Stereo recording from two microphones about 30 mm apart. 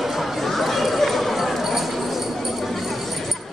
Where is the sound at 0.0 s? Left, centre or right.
Centre.